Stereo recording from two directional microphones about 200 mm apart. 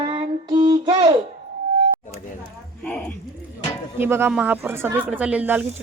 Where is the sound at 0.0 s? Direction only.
25° right (ahead or behind).